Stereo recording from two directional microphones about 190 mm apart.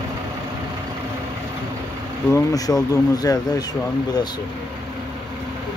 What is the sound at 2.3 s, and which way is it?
Speech, 20° left (ahead or behind).